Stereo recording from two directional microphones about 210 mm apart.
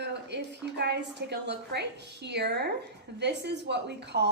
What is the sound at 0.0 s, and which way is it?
A woman's voice, 55° right (ahead or behind).